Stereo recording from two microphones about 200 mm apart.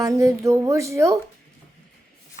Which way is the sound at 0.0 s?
15° right (ahead or behind).